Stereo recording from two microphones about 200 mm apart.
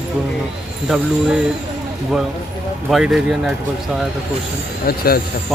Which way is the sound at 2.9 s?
Centre (ahead or behind).